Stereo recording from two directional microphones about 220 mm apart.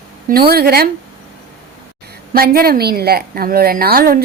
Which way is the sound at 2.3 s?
40° right (ahead or behind).